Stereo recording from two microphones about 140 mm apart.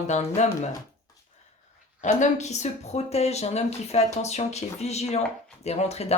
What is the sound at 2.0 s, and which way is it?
Speech, 55° left (ahead or behind).